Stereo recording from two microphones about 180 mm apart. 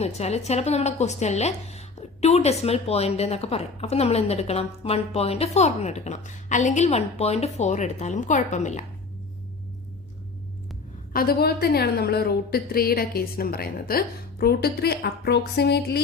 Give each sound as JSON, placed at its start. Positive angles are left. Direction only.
{"t": 0.0, "sound": "a woman's voice", "side_deg": 35}
{"t": 11.1, "sound": "a woman's voice", "side_deg": 55}